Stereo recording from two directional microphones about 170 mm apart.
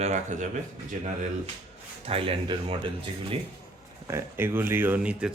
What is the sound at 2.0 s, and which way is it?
Speech, 35° right (ahead or behind).